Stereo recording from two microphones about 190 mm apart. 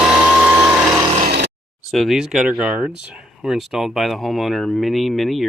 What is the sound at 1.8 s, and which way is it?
Speech, centre (ahead or behind).